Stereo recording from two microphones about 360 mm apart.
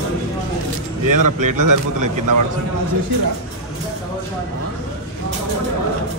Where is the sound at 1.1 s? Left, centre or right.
Right.